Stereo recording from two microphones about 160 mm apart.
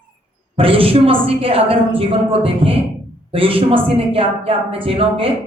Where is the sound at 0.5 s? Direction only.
35° right (ahead or behind).